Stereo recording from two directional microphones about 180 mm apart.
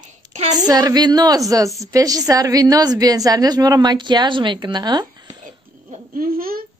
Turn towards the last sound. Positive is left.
turn(degrees=-55)  # may be behind; listen again after turning